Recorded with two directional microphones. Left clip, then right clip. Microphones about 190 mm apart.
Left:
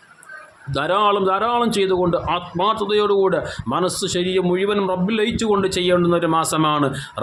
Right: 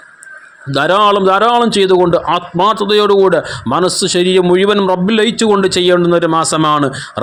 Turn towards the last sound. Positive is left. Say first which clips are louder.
# right 7 dB
turn(degrees=-30)  # may be behind; listen again after turning